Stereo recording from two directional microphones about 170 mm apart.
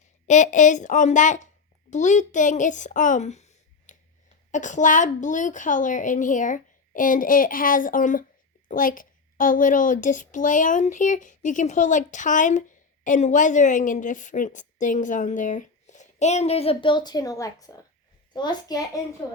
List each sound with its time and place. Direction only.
0.3 s a woman's voice: 45° left (ahead or behind); by 18.8 s 25° left (ahead or behind)